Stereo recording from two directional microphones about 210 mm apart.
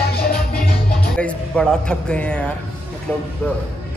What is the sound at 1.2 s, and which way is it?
A man's voice, 5° left (ahead or behind).